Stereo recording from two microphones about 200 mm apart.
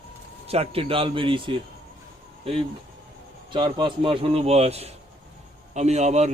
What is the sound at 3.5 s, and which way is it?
A man's voice, 25° right (ahead or behind).